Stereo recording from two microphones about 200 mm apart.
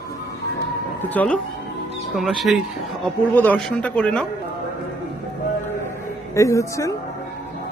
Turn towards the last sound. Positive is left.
turn(degrees=15)  # may be behind; listen again after turning